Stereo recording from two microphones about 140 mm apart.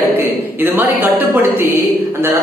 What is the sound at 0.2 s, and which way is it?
Speech, 15° right (ahead or behind).